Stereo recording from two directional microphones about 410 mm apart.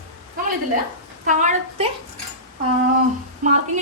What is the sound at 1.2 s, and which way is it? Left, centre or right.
Speech, centre.